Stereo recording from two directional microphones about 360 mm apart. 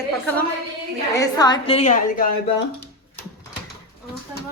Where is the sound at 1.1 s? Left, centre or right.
Centre.